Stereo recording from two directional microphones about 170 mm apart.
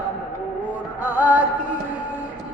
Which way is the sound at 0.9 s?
10° right (ahead or behind).